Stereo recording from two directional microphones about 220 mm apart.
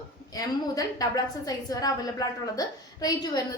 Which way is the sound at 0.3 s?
15° left (ahead or behind).